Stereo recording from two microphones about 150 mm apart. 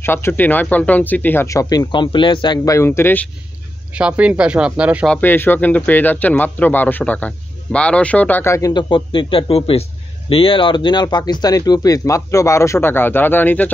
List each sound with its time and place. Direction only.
0.0 s speech: 15° left (ahead or behind)
4.0 s speech: 5° right (ahead or behind)
5.0 s speech: 10° left (ahead or behind)